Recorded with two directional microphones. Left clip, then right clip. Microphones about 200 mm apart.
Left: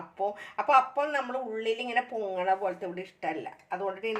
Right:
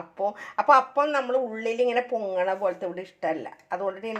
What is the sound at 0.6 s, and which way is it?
Speech, 35° right (ahead or behind).